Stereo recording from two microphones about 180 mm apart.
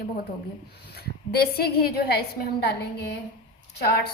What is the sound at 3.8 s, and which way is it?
Speech, 65° left (ahead or behind).